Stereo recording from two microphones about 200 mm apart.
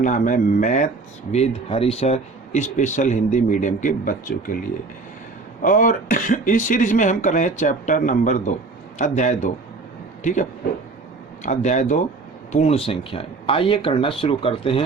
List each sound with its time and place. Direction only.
0.0 s speech: 40° left (ahead or behind)
5.6 s speech: 40° left (ahead or behind)
11.4 s speech: 35° left (ahead or behind)